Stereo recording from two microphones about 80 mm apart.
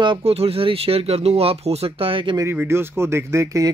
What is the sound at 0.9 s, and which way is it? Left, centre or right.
Speech, right.